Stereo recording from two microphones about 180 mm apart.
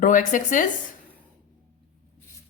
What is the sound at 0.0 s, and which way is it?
Speech, 45° left (ahead or behind).